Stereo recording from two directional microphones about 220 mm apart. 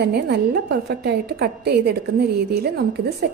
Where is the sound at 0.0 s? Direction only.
45° right (ahead or behind).